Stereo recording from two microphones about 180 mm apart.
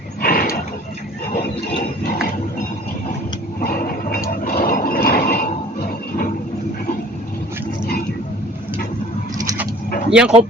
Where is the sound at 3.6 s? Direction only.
55° left (ahead or behind).